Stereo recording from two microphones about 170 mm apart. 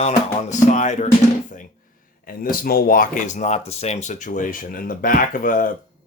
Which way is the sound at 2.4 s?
60° left (ahead or behind).